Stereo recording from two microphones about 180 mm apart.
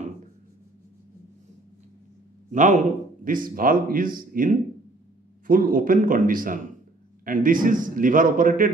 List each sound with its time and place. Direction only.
2.5 s a man's voice: 45° right (ahead or behind)